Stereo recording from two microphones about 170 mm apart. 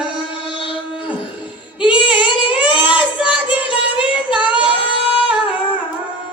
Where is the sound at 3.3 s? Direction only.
30° left (ahead or behind).